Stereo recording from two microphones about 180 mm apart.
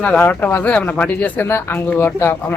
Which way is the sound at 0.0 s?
10° left (ahead or behind).